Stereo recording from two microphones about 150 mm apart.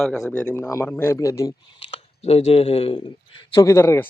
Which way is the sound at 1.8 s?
40° left (ahead or behind).